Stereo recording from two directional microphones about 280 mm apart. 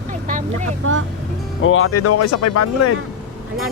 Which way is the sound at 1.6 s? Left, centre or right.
Left.